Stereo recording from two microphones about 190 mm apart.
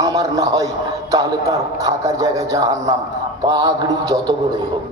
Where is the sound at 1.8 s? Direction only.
20° right (ahead or behind).